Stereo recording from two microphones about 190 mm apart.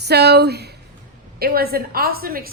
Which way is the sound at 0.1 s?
60° right (ahead or behind).